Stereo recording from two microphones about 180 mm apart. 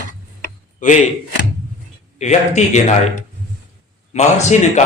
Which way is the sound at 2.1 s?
40° left (ahead or behind).